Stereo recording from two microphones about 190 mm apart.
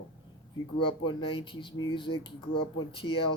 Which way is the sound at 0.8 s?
30° left (ahead or behind).